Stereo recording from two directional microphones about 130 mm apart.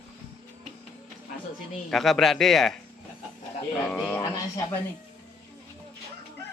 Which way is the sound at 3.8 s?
5° left (ahead or behind).